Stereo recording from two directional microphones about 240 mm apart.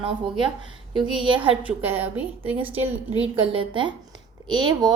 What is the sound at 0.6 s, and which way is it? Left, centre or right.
Speech, centre.